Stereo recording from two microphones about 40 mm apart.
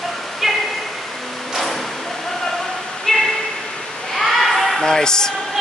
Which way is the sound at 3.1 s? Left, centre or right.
Centre.